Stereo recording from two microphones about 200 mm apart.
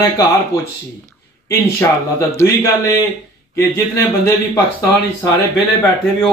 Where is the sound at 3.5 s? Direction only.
15° left (ahead or behind).